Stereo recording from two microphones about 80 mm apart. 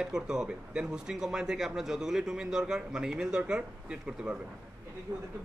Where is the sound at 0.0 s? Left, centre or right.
Centre.